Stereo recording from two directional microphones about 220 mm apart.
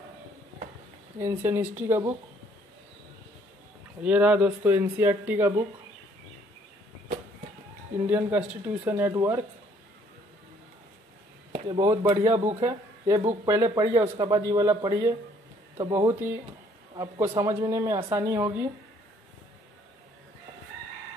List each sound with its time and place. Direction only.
1.2 s speech: 10° right (ahead or behind)
4.0 s speech: 5° right (ahead or behind)
8.1 s speech: 5° right (ahead or behind)
11.5 s speech: 25° right (ahead or behind)